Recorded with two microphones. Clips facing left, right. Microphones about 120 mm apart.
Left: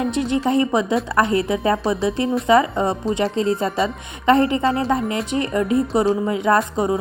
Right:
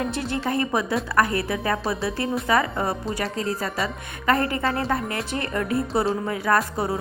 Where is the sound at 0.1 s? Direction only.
20° left (ahead or behind).